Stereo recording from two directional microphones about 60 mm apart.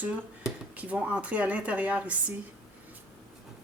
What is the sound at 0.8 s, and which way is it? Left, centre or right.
Speech, right.